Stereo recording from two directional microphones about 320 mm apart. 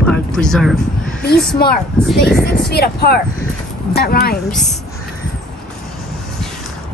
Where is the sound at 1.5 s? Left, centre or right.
Left.